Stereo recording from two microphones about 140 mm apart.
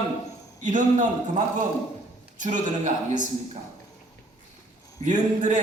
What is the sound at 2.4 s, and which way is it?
Speech, 60° right (ahead or behind).